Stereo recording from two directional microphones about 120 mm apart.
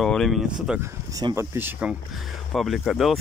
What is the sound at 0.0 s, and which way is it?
Speech, centre (ahead or behind).